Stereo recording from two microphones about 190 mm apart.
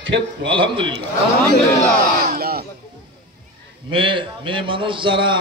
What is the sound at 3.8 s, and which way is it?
A man's voice, 25° right (ahead or behind).